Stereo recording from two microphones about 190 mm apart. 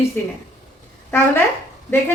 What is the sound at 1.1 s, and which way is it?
Speech, 10° left (ahead or behind).